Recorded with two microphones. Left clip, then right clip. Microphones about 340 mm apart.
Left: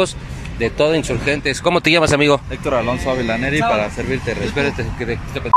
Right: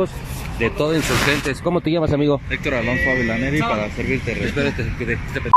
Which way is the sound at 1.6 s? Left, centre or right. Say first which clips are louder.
Left 6 dB; left.